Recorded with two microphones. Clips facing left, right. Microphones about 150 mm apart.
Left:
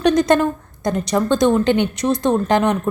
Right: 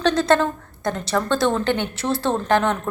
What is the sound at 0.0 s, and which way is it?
A woman's voice, 15° left (ahead or behind).